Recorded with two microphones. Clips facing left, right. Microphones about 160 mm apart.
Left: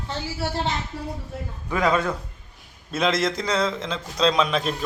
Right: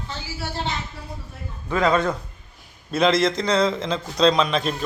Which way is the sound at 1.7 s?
10° left (ahead or behind).